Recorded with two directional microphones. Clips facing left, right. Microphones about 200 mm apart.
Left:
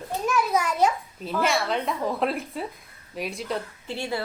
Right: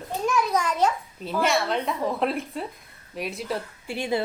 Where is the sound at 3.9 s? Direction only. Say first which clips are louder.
Right 4 dB; 15° right (ahead or behind).